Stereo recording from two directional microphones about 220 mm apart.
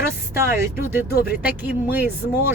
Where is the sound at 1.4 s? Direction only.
5° right (ahead or behind).